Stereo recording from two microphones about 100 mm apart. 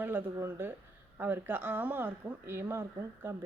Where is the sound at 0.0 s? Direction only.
20° right (ahead or behind).